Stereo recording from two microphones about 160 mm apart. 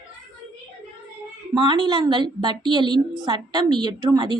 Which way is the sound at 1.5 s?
30° right (ahead or behind).